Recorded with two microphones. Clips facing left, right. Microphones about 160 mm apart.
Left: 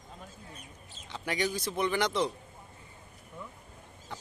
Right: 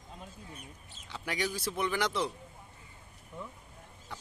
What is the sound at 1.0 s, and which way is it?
Speech, 5° right (ahead or behind).